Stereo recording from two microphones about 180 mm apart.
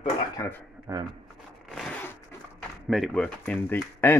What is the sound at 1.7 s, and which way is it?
Zipper, centre (ahead or behind).